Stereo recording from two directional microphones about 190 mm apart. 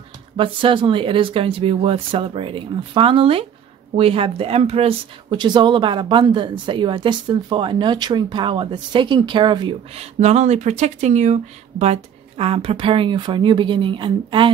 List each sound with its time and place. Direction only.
0.4 s speech: 25° right (ahead or behind)